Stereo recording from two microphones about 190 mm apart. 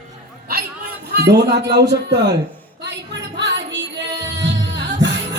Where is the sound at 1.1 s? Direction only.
60° right (ahead or behind).